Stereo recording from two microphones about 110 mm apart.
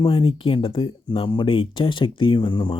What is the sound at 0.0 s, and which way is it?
Speech, 50° left (ahead or behind).